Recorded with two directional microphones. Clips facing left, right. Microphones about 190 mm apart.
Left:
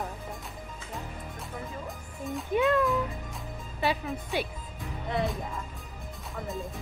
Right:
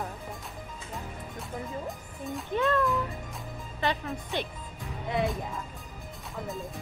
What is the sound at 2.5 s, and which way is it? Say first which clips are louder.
Music: left 2 dB; 15° left (ahead or behind).